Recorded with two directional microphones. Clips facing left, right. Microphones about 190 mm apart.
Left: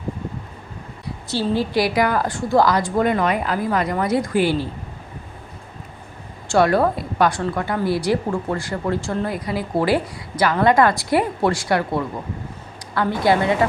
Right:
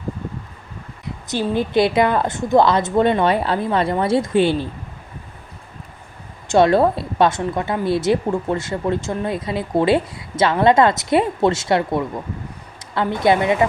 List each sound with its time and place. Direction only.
1.0 s a woman's voice: 20° right (ahead or behind)
6.5 s a woman's voice: 25° right (ahead or behind)